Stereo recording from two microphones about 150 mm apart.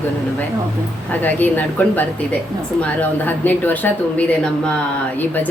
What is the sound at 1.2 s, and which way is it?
Speech, 10° left (ahead or behind).